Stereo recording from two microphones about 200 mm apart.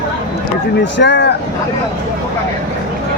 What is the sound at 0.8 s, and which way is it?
Speech, 60° left (ahead or behind).